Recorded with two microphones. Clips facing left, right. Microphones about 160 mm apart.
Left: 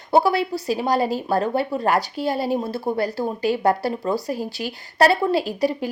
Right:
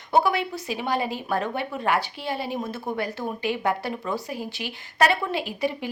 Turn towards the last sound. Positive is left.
turn(degrees=40)  # may be behind; listen again after turning